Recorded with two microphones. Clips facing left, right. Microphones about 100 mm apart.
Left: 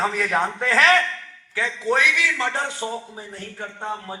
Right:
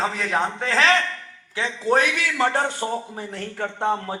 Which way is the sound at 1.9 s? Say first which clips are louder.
Right 1 dB; 45° right (ahead or behind).